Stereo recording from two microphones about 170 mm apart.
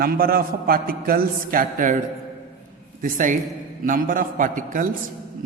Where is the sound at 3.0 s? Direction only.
50° right (ahead or behind).